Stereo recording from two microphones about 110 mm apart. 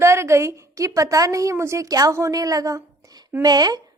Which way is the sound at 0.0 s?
25° right (ahead or behind).